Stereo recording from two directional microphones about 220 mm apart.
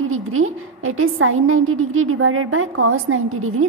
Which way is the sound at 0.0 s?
70° right (ahead or behind).